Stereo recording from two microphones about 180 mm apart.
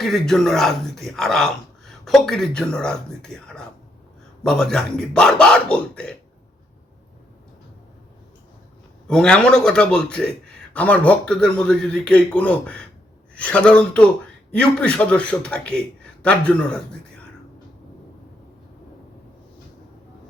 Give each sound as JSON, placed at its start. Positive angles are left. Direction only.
{"t": 0.0, "sound": "a man's voice", "side_deg": 0}
{"t": 9.0, "sound": "a man's voice", "side_deg": 5}